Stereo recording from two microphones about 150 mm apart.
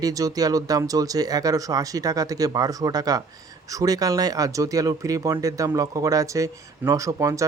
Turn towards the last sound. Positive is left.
turn(degrees=-20)  # may be behind; listen again after turning